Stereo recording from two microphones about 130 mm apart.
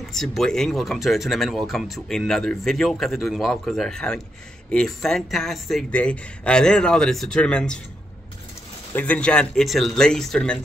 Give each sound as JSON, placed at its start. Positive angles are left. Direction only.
{"t": 0.1, "sound": "speech", "side_deg": 0}
{"t": 8.9, "sound": "speech", "side_deg": 10}